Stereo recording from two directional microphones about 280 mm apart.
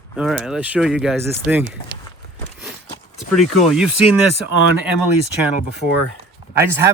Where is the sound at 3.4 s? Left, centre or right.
Centre.